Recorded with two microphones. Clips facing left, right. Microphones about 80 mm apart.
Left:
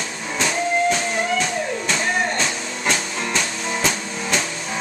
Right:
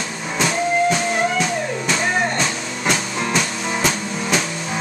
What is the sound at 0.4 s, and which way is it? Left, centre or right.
Music, centre.